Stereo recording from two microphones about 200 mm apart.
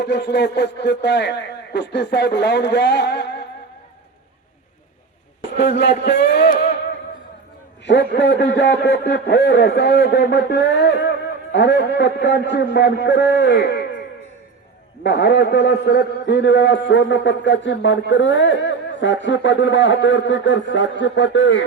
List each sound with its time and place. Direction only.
0.0 s a man's voice: 60° left (ahead or behind)
5.5 s a man's voice: 60° left (ahead or behind)
7.9 s a man's voice: 60° left (ahead or behind)
15.0 s a man's voice: 60° left (ahead or behind)